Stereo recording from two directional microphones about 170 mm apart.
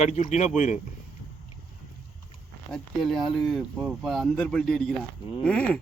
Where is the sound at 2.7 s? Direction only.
Centre (ahead or behind).